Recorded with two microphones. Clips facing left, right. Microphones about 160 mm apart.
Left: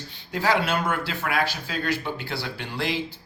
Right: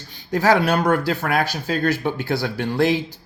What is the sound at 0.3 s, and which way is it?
Speech, 45° right (ahead or behind).